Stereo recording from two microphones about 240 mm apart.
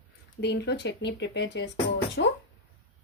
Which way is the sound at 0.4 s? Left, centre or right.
Left.